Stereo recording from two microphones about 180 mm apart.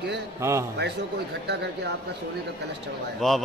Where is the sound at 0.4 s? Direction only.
15° right (ahead or behind).